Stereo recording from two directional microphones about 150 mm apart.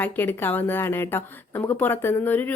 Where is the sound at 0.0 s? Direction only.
15° left (ahead or behind).